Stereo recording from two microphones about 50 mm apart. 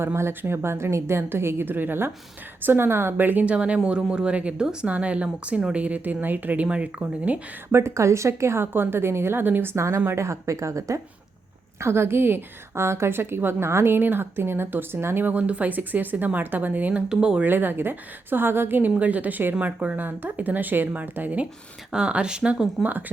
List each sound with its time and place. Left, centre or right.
0.0 s a woman's voice: right
1.6 s a woman's voice: right
3.4 s a woman's voice: right
6.7 s a woman's voice: right
7.7 s a woman's voice: right
9.7 s a woman's voice: right
11.8 s a woman's voice: right
17.1 s speech: centre
17.4 s a woman's voice: right
20.0 s speech: right
21.9 s speech: centre
22.8 s speech: right